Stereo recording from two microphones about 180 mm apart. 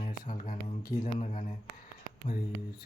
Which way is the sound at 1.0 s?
40° left (ahead or behind).